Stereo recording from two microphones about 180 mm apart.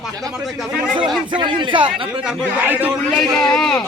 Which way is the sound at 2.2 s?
10° right (ahead or behind).